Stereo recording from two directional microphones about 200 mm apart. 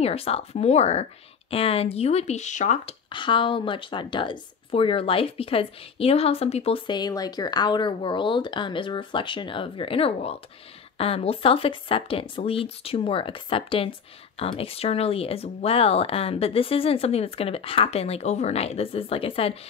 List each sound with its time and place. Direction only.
0.0 s speech: 30° left (ahead or behind)